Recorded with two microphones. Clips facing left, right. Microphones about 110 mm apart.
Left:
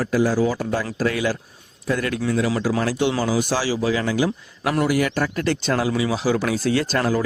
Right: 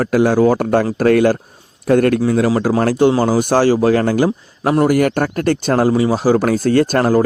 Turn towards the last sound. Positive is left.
turn(degrees=-50)  # may be behind; listen again after turning